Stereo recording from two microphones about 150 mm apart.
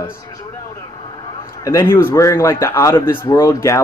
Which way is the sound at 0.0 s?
20° left (ahead or behind).